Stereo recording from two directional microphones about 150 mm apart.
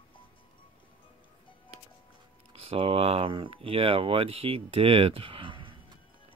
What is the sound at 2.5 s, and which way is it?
Speech, 40° right (ahead or behind).